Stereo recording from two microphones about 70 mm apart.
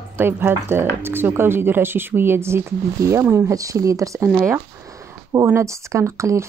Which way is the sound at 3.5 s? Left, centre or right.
Right.